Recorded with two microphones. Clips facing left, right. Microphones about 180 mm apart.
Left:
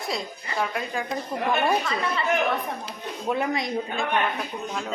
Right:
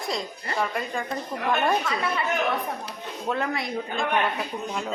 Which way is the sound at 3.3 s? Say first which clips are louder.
Left 2 dB; 15° left (ahead or behind).